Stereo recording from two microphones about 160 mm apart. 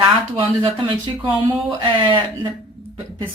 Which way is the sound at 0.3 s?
30° right (ahead or behind).